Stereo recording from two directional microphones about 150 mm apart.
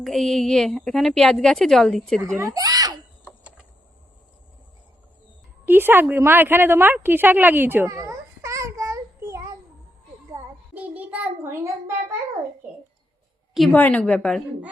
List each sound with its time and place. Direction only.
0.0 s a woman's voice: centre (ahead or behind)
2.2 s speech: 20° right (ahead or behind)
3.2 s a sound: 5° right (ahead or behind)
5.6 s a woman's voice: 15° right (ahead or behind)
10.4 s child singing: 20° right (ahead or behind)
10.8 s a sound: 10° right (ahead or behind)
13.7 s a woman's voice: 10° left (ahead or behind)